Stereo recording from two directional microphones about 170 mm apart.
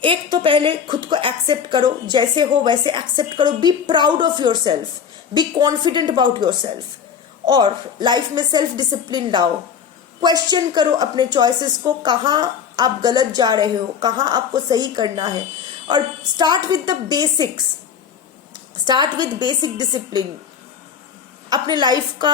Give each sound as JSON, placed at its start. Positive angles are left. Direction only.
{"t": 0.0, "sound": "a woman's voice", "side_deg": -30}
{"t": 18.9, "sound": "a woman's voice", "side_deg": -25}
{"t": 21.5, "sound": "a woman's voice", "side_deg": -25}